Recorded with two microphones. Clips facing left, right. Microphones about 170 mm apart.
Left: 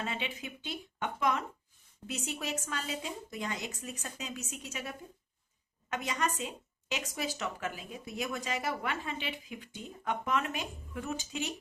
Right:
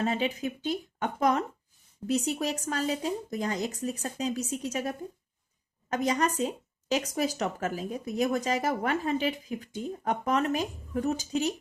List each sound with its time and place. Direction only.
0.0 s speech: 40° right (ahead or behind)